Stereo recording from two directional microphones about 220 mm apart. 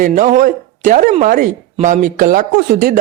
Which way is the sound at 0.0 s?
35° right (ahead or behind).